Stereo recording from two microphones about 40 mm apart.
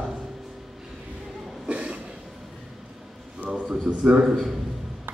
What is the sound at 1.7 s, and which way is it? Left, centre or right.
Cough, right.